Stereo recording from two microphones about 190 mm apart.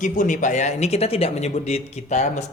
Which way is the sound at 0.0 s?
40° left (ahead or behind).